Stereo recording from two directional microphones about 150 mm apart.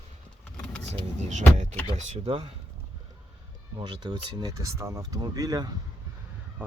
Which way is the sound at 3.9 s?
30° right (ahead or behind).